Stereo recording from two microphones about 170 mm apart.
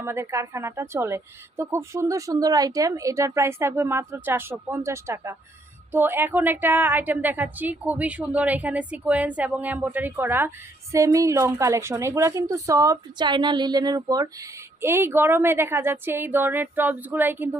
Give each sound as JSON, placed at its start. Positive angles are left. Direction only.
{"t": 0.0, "sound": "a woman's voice", "side_deg": -15}